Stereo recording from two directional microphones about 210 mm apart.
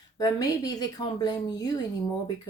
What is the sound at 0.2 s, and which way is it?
Speech, 15° left (ahead or behind).